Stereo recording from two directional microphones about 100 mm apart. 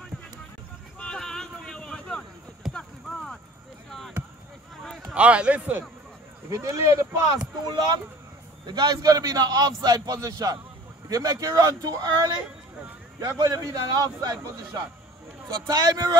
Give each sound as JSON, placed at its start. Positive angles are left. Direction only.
{"t": 0.9, "sound": "a sound", "side_deg": 5}
{"t": 2.7, "sound": "clip-clop", "side_deg": 10}
{"t": 5.1, "sound": "speech", "side_deg": -10}
{"t": 6.5, "sound": "speech", "side_deg": -30}
{"t": 7.6, "sound": "a man's voice", "side_deg": -45}